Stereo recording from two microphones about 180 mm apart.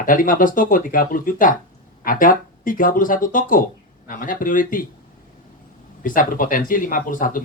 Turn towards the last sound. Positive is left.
turn(degrees=50)  # may be behind; listen again after turning